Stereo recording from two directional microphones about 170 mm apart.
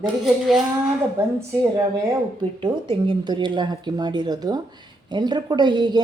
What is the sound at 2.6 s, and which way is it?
A woman's voice, 25° right (ahead or behind).